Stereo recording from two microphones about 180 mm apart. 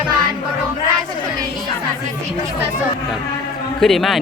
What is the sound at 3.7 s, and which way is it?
Speech, centre (ahead or behind).